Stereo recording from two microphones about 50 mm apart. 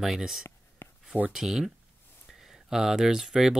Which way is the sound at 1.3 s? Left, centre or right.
Centre.